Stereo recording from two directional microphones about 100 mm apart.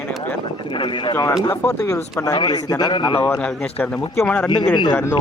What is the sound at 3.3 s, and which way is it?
Speech, 10° left (ahead or behind).